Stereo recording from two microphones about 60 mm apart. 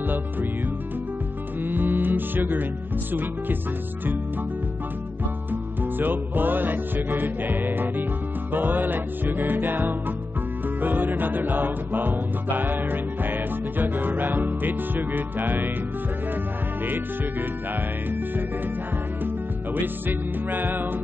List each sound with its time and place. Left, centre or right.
0.0 s music: right
1.6 s music: right
5.5 s music: right
19.2 s music: right